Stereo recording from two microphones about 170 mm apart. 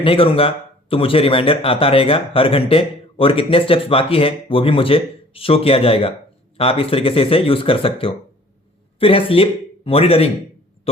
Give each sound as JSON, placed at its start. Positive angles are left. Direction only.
{"t": 0.0, "sound": "a man's voice", "side_deg": 35}